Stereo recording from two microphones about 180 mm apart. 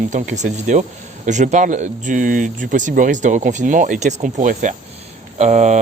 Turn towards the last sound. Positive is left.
turn(degrees=-40)  # may be behind; listen again after turning